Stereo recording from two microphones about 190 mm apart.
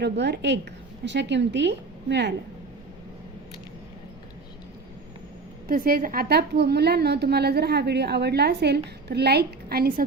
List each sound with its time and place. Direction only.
0.0 s speech: 65° right (ahead or behind)
5.6 s a woman's voice: 50° right (ahead or behind)